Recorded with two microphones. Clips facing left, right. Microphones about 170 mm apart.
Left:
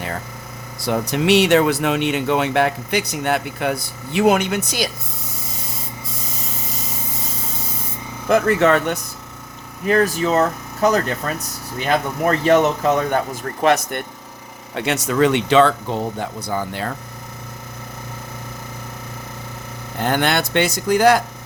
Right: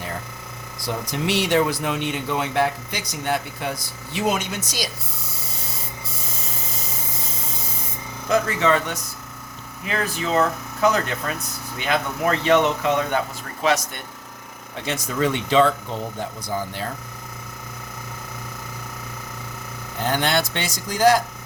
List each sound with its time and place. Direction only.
0.9 s speech: 70° left (ahead or behind)
8.3 s speech: 60° left (ahead or behind)
9.8 s speech: 45° left (ahead or behind)
14.8 s speech: 75° left (ahead or behind)
16.5 s speech: 60° left (ahead or behind)
20.1 s speech: 60° left (ahead or behind)